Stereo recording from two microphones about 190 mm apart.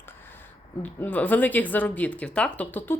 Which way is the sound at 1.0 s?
10° left (ahead or behind).